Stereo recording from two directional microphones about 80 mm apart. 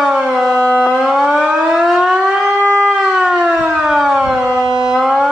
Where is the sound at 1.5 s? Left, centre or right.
Centre.